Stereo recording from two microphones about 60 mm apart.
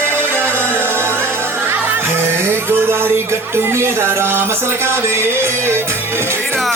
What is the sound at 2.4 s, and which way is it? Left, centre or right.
Music, right.